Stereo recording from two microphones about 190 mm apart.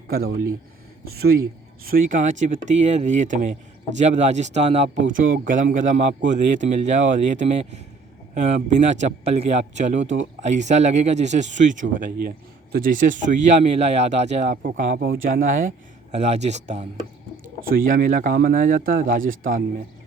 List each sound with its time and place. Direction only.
0.1 s speech: 55° right (ahead or behind)
1.8 s speech: 50° right (ahead or behind)
10.0 s speech: 75° right (ahead or behind)
10.4 s speech: 40° right (ahead or behind)
14.5 s speech: 50° right (ahead or behind)
16.1 s speech: 35° right (ahead or behind)
17.6 s speech: 50° right (ahead or behind)